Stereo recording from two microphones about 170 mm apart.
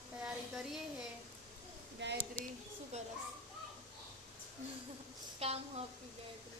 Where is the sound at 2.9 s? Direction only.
40° right (ahead or behind).